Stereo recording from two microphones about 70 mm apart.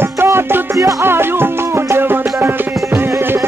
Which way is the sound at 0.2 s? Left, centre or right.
Right.